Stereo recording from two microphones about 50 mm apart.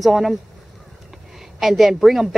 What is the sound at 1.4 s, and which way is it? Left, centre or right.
Speech, centre.